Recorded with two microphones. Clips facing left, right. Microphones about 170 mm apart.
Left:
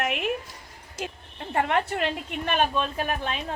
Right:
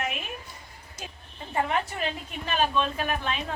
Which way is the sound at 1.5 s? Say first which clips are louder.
Left 3 dB; 65° left (ahead or behind).